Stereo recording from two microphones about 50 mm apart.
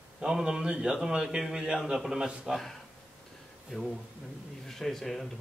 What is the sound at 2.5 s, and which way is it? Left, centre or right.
Speech, centre.